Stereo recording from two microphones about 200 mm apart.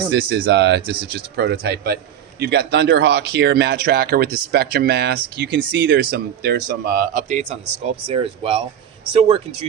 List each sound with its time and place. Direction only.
0.1 s speech: 55° right (ahead or behind); by 7.6 s 40° right (ahead or behind)
8.0 s speech: 30° right (ahead or behind)